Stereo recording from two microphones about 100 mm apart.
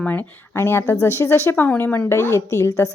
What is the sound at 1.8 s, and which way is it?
Speech, 15° left (ahead or behind).